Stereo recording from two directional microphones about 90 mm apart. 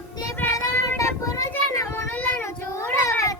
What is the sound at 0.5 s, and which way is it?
Child singing, 35° left (ahead or behind).